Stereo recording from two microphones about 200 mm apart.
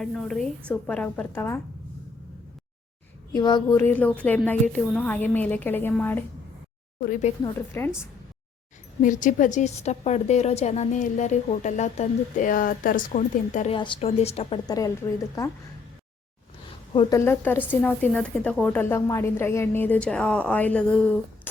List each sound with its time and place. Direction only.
0.0 s a woman's voice: centre (ahead or behind)
3.3 s a woman's voice: 20° left (ahead or behind)
7.0 s a woman's voice: 40° left (ahead or behind)
7.4 s a woman's voice: 10° left (ahead or behind)
9.0 s a woman's voice: 40° left (ahead or behind)
13.7 s a woman's voice: 25° left (ahead or behind)
14.7 s a woman's voice: 15° left (ahead or behind)
16.9 s speech: 25° left (ahead or behind)
17.2 s a woman's voice: 10° left (ahead or behind)